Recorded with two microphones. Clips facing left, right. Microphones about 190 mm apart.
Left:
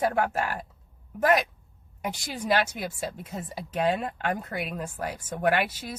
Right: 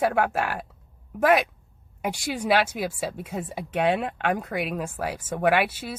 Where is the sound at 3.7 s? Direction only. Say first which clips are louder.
Right 2 dB; 65° right (ahead or behind).